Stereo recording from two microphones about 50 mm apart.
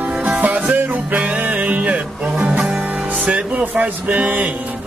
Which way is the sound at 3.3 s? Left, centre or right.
Right.